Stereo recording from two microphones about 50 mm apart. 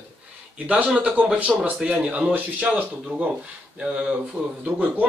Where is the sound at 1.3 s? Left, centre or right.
Right.